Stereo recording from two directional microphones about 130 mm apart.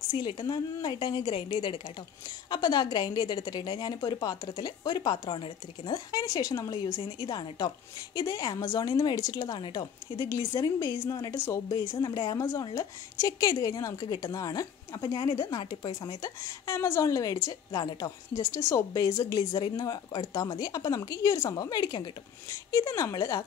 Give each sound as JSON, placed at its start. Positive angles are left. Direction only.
{"t": 0.1, "sound": "speech", "side_deg": 35}
{"t": 11.9, "sound": "a woman's voice", "side_deg": 30}